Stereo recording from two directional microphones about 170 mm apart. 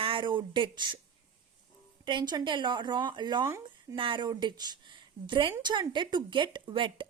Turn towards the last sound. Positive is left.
turn(degrees=-30)  # may be behind; listen again after turning